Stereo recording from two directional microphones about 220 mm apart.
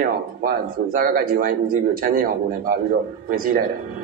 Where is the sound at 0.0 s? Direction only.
40° right (ahead or behind).